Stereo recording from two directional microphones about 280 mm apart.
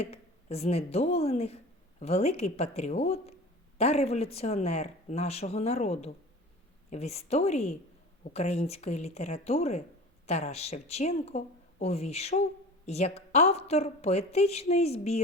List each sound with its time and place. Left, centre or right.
0.0 s speech: left